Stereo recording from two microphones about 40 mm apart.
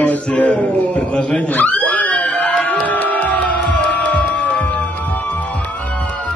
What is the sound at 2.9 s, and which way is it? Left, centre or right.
Music, left.